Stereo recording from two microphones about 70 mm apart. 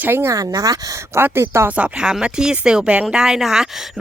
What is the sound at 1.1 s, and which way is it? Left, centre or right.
Speech, right.